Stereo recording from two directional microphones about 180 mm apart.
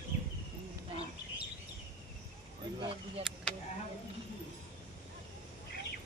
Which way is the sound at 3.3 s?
Centre (ahead or behind).